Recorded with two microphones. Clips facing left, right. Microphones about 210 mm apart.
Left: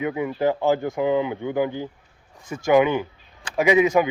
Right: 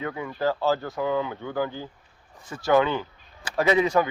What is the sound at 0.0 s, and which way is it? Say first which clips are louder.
Speech: left 5 dB; 15° left (ahead or behind).